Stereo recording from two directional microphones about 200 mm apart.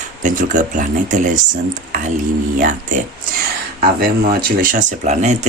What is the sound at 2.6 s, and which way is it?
Speech, 40° right (ahead or behind).